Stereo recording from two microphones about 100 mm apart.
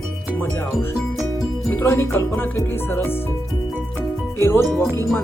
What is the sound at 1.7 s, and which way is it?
Speech, 25° left (ahead or behind).